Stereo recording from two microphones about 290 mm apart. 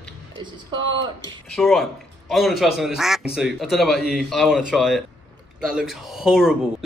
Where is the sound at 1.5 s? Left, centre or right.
Centre.